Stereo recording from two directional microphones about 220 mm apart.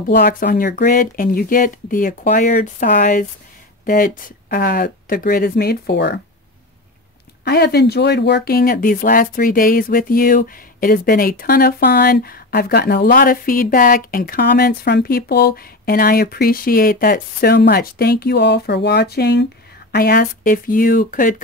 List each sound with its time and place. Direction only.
0.1 s speech: 40° left (ahead or behind)
7.4 s speech: 50° left (ahead or behind)